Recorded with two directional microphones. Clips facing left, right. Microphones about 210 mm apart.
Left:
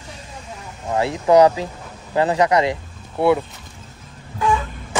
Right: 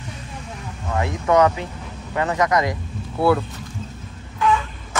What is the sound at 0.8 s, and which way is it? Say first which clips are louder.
Speech: left 4 dB; 30° left (ahead or behind).